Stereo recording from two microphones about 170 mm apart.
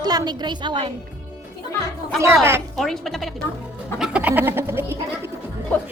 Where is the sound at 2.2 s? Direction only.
15° right (ahead or behind).